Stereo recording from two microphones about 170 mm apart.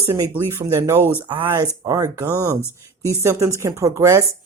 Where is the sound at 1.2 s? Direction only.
30° right (ahead or behind).